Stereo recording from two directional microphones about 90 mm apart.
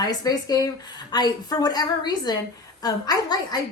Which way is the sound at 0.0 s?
45° left (ahead or behind).